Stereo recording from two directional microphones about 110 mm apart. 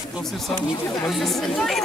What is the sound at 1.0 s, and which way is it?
Speech, centre (ahead or behind).